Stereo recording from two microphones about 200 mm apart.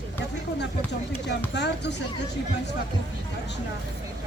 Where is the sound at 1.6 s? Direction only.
60° left (ahead or behind).